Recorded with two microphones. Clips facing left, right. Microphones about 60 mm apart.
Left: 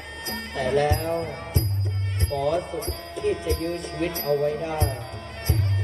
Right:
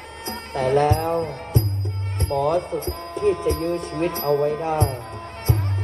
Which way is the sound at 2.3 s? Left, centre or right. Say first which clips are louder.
Right 4 dB; right.